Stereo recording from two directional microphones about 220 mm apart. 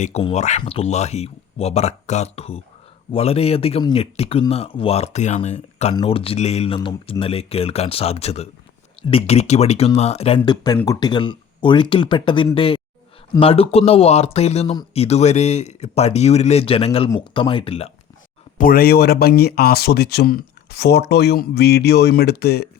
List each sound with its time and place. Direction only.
0.0 s speech: 25° left (ahead or behind)
18.5 s speech: 40° left (ahead or behind)